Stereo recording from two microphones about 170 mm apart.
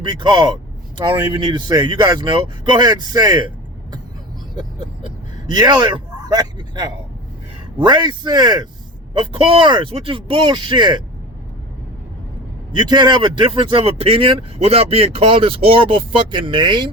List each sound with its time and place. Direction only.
0.0 s speech: 25° right (ahead or behind)
5.5 s speech: 25° right (ahead or behind)
12.7 s speech: 25° right (ahead or behind)